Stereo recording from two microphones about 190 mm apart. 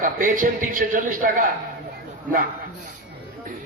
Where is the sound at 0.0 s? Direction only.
45° right (ahead or behind).